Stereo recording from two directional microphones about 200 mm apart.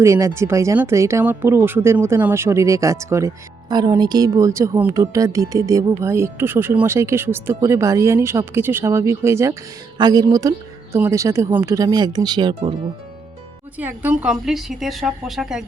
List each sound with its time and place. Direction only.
0.0 s a woman's voice: 15° right (ahead or behind)
13.7 s a woman's voice: 10° right (ahead or behind)